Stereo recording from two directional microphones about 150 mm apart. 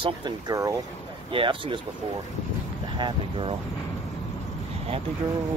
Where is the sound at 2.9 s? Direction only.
35° right (ahead or behind).